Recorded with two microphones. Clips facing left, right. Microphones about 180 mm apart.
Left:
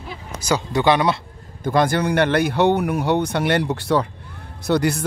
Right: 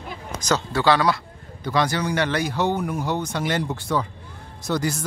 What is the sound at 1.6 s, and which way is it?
Speech, 50° left (ahead or behind).